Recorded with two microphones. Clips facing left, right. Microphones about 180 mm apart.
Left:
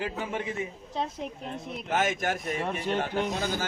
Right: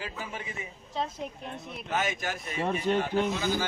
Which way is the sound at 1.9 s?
50° left (ahead or behind).